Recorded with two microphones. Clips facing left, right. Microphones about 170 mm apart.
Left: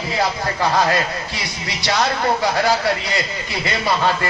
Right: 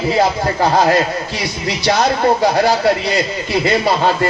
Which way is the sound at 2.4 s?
40° right (ahead or behind).